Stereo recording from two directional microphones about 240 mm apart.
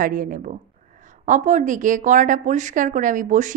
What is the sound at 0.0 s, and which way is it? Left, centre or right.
A woman's voice, right.